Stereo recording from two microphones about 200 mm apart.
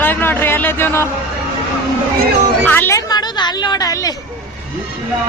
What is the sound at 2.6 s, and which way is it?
A woman's voice, 10° left (ahead or behind).